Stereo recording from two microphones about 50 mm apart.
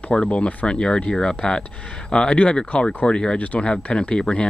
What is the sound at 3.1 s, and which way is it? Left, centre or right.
Speech, centre.